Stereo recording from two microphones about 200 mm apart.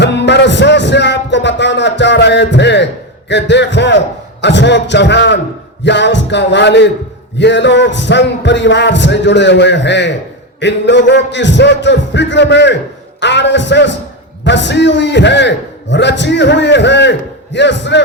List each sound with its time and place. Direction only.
0.0 s music: 60° left (ahead or behind)
4.4 s a man's voice: 60° left (ahead or behind)